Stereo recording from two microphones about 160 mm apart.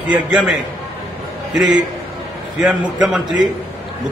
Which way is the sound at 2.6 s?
5° right (ahead or behind).